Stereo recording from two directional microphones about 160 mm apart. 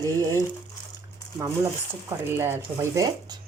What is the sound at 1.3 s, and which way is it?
Speech, 20° right (ahead or behind).